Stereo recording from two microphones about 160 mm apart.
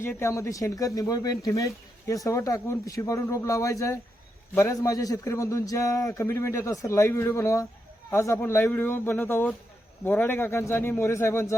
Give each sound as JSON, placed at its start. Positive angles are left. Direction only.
{"t": 0.2, "sound": "a man's voice", "side_deg": 20}